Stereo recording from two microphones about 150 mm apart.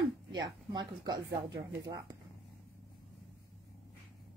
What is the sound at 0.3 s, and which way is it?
Speech, 25° right (ahead or behind).